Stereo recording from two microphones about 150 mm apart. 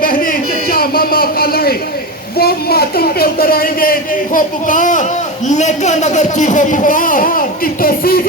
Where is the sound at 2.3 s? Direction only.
90° left.